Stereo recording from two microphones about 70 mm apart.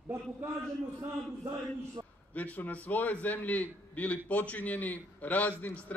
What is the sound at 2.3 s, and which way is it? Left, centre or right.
A man's voice, left.